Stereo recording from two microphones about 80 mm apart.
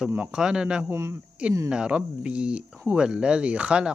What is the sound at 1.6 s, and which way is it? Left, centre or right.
Speech, centre.